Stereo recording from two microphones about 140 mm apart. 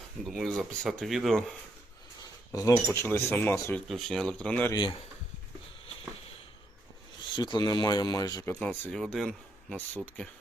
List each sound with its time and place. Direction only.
0.3 s speech: centre (ahead or behind)
2.5 s speech: 20° left (ahead or behind)
3.8 s speech: centre (ahead or behind)
4.7 s speech: 35° left (ahead or behind)
7.3 s speech: 35° left (ahead or behind)
8.5 s speech: 5° left (ahead or behind)